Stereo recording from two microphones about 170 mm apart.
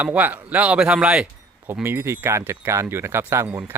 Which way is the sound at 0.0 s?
10° right (ahead or behind).